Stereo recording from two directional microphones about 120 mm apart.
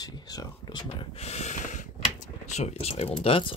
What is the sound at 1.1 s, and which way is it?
Speech, 65° left (ahead or behind).